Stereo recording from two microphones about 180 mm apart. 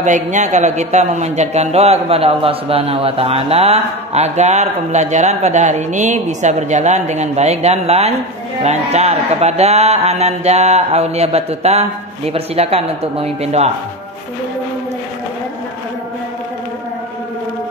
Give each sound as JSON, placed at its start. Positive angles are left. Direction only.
{"t": 0.0, "sound": "a man's voice", "side_deg": -40}